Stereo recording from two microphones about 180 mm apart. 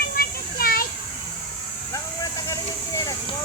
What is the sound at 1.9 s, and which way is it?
Vehicle, 20° left (ahead or behind).